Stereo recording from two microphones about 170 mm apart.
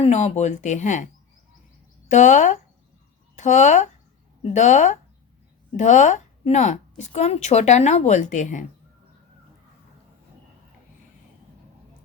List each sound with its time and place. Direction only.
0.0 s a woman's voice: 40° left (ahead or behind)
2.0 s a woman's voice: 45° left (ahead or behind)